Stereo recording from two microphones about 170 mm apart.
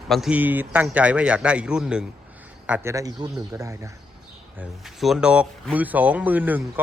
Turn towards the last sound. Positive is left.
turn(degrees=-10)  # may be behind; listen again after turning